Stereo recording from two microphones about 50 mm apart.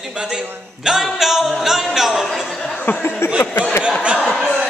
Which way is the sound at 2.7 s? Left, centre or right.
Left.